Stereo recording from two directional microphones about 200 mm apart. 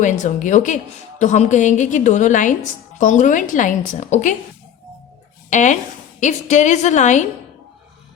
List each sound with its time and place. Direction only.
0.0 s a woman's voice: 40° left (ahead or behind)
5.5 s a woman's voice: 35° left (ahead or behind)